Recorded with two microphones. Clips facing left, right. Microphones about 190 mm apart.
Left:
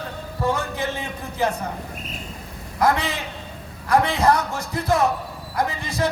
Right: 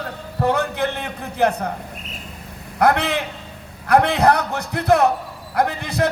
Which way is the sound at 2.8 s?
65° right (ahead or behind).